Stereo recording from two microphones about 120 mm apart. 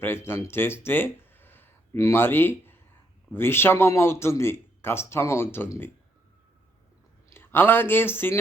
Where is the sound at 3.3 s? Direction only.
20° left (ahead or behind).